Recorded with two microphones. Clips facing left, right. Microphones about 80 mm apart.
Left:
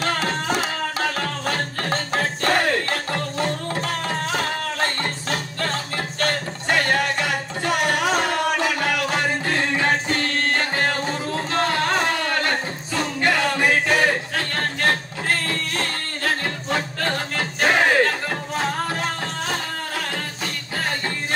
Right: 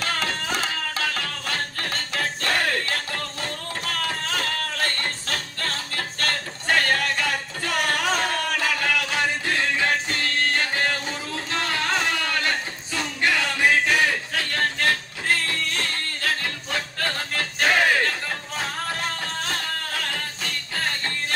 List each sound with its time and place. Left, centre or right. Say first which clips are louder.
0.9 s music: left 4 dB; left
17.4 s music: left 2 dB; centre